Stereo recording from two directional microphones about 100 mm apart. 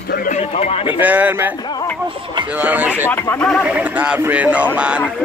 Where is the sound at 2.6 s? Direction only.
15° right (ahead or behind).